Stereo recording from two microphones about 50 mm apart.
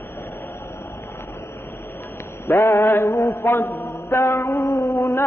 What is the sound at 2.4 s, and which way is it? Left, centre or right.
Mantra, left.